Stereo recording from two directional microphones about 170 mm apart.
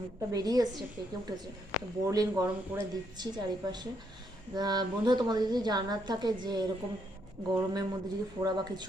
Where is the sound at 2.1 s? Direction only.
20° right (ahead or behind).